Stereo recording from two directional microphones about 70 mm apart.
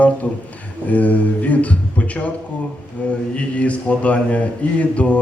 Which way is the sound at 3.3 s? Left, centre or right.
Centre.